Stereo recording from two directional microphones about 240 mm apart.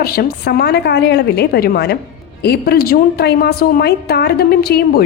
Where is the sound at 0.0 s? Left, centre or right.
Left.